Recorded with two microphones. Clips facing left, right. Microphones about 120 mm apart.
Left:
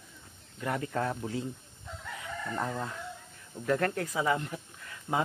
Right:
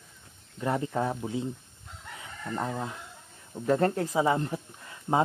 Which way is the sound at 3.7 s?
25° right (ahead or behind).